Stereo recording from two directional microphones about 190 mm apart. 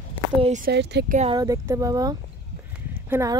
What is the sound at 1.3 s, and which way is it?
Speech, 20° right (ahead or behind).